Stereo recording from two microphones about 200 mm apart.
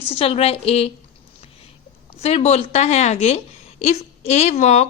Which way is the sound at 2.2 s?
30° left (ahead or behind).